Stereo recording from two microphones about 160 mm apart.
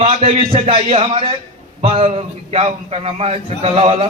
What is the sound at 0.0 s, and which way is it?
A man's voice, 40° right (ahead or behind).